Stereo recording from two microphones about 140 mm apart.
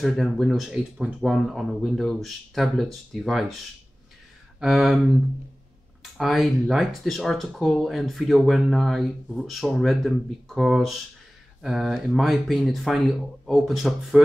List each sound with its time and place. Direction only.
0.0 s speech: centre (ahead or behind)
4.6 s speech: 5° right (ahead or behind)
6.1 s speech: centre (ahead or behind)